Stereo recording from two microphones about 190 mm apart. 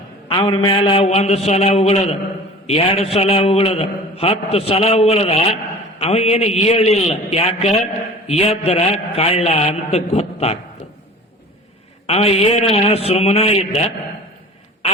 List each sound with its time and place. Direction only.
0.3 s a man's voice: 25° left (ahead or behind)
12.0 s a man's voice: 30° left (ahead or behind)